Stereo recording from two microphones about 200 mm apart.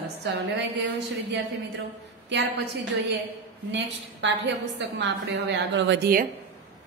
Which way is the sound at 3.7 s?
65° right (ahead or behind).